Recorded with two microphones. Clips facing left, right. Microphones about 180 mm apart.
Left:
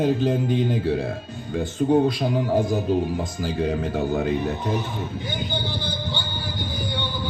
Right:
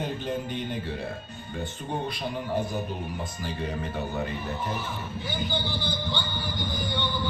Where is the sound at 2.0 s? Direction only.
90° left.